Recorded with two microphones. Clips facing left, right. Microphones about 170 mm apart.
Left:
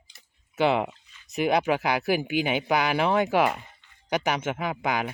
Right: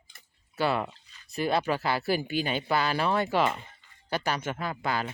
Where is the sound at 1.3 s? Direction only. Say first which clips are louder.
Left 4 dB; 15° left (ahead or behind).